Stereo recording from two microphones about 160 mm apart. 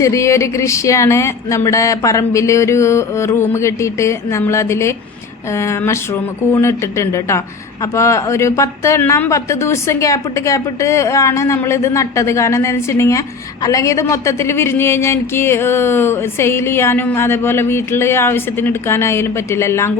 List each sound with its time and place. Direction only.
0.0 s a woman's voice: 20° left (ahead or behind)